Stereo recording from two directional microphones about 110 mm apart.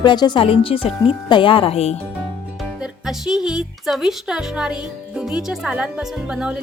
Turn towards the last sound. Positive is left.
turn(degrees=-10)  # may be behind; listen again after turning